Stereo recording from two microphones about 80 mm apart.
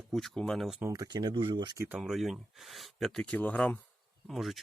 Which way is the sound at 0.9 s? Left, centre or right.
Right.